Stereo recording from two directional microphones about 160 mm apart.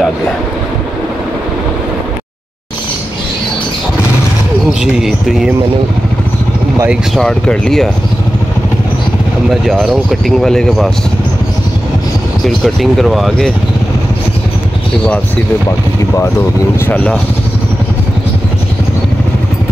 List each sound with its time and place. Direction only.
4.6 s a sound: centre (ahead or behind)
6.9 s speech: 5° left (ahead or behind)
9.5 s speech: centre (ahead or behind)
12.4 s speech: centre (ahead or behind)
16.8 s speech: 10° left (ahead or behind)